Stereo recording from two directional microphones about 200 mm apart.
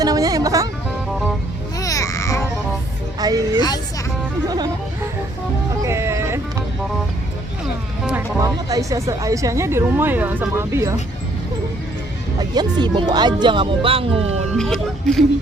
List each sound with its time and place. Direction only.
0.0 s music: 20° right (ahead or behind)
1.8 s babbling: 15° left (ahead or behind)
3.2 s speech: 20° right (ahead or behind)
4.4 s music: 20° right (ahead or behind)
5.8 s music: 15° right (ahead or behind)
8.0 s speech: 15° right (ahead or behind)
12.4 s speech: 20° right (ahead or behind)
14.5 s speech: centre (ahead or behind)